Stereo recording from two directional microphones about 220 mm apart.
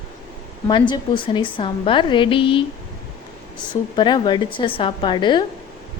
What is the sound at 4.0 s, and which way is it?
A woman's voice, 20° left (ahead or behind).